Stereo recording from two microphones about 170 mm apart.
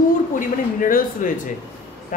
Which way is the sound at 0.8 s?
55° left (ahead or behind).